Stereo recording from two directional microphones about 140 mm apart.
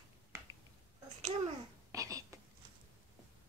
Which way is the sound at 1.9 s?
25° right (ahead or behind).